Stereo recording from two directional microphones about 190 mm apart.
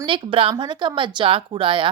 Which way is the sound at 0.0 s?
25° right (ahead or behind).